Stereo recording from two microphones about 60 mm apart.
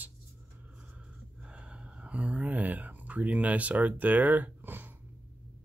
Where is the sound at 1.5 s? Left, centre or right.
Centre; by 4.9 s right.